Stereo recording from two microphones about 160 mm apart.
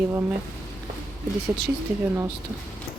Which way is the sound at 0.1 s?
15° right (ahead or behind).